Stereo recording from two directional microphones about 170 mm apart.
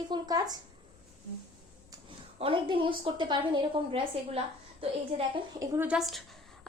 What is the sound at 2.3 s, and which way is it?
A woman's voice, 30° right (ahead or behind).